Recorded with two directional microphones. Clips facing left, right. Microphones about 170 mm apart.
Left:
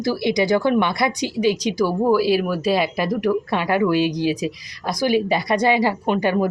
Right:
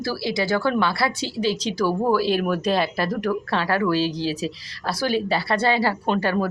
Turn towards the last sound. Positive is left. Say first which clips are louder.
# left 3 dB
turn(degrees=15)  # may be behind; listen again after turning